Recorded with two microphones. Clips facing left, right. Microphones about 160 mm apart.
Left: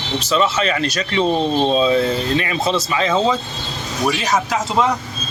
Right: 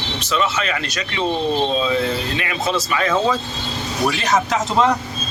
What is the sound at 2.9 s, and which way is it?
Speech, 20° left (ahead or behind).